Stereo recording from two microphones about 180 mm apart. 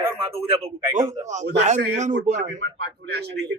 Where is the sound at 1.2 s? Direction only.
40° right (ahead or behind).